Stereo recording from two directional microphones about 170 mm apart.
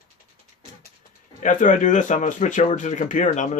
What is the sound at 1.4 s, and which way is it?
Speech, 50° left (ahead or behind).